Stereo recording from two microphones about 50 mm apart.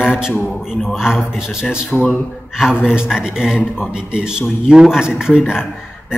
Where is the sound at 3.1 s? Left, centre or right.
Centre.